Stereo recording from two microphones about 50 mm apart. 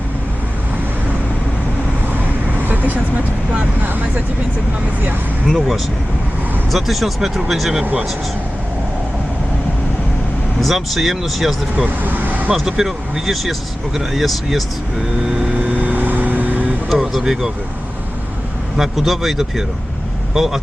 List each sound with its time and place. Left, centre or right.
2.6 s vehicle: right
3.8 s vehicle: right
5.5 s speech: centre
10.6 s speech: centre
11.9 s speech: right
12.7 s speech: centre
15.5 s vehicle: right
16.9 s a sound: centre
18.8 s speech: centre